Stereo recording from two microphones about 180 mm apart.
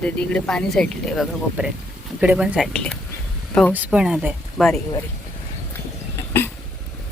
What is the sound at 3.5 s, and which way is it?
Speech, 10° left (ahead or behind).